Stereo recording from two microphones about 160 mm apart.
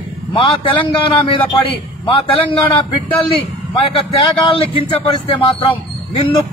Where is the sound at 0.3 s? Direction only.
35° left (ahead or behind).